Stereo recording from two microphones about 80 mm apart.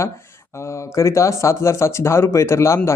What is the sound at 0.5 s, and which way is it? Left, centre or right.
Speech, left.